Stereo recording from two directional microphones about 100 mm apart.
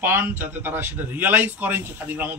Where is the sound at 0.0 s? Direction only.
20° right (ahead or behind).